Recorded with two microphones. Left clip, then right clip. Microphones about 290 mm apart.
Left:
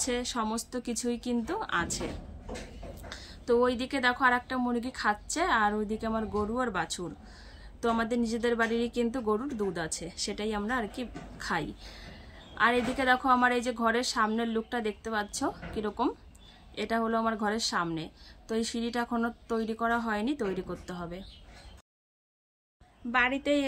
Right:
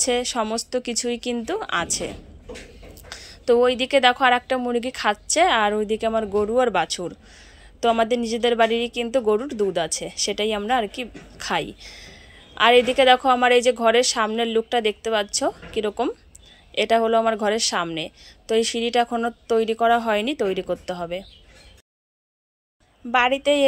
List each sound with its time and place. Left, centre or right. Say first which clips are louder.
0.0 s a woman's voice: right 9 dB; centre
3.1 s a woman's voice: right 9 dB; centre
23.1 s a woman's voice: right 8 dB; centre